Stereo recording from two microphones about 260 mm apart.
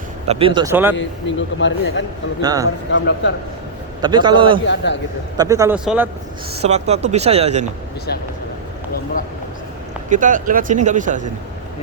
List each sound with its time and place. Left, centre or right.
0.3 s a man's voice: right
0.9 s speech: left
2.4 s a man's voice: centre
2.9 s speech: left
4.0 s a man's voice: centre
4.6 s speech: left
5.4 s a man's voice: centre
6.6 s speech: right
10.1 s speech: right